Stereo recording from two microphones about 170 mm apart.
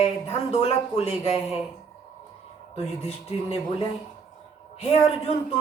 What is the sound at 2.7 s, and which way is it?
Speech, 35° left (ahead or behind).